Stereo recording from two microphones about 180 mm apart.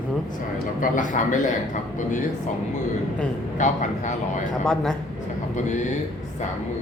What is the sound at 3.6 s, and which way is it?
Speech, 40° left (ahead or behind).